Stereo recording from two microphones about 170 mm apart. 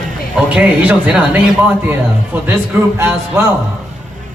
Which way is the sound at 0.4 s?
10° right (ahead or behind).